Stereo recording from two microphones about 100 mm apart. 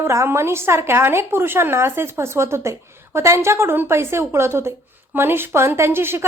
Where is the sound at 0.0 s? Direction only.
25° right (ahead or behind).